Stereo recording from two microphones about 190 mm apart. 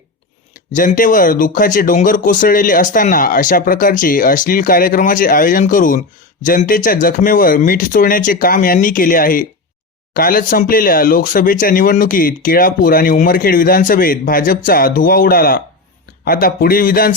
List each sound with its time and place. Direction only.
0.5 s speech: 45° left (ahead or behind)